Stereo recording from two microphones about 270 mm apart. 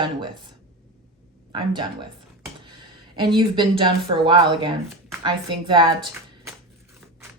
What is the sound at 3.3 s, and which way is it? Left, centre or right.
Speech, centre.